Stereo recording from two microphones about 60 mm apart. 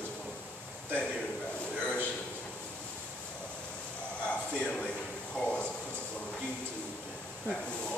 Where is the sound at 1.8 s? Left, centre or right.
Left.